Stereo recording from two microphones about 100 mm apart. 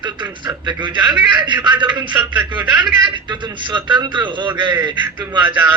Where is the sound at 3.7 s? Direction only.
50° right (ahead or behind).